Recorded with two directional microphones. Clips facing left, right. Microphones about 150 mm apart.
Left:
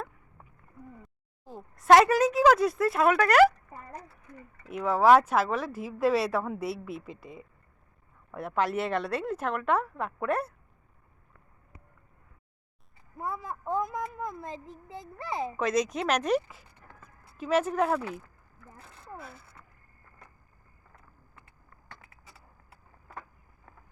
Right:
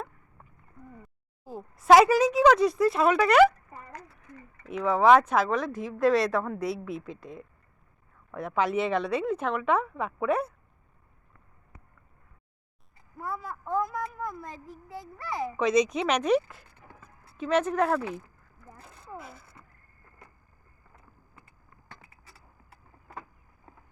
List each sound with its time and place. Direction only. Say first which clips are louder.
1.5 s speech: right 1 dB; centre (ahead or behind)
4.6 s speech: right 1 dB; 5° left (ahead or behind)
13.1 s a woman's voice: even; 20° left (ahead or behind)
15.5 s speech: right 5 dB; centre (ahead or behind)